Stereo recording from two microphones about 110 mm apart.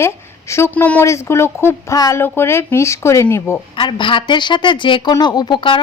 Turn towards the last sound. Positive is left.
turn(degrees=45)  # may be behind; listen again after turning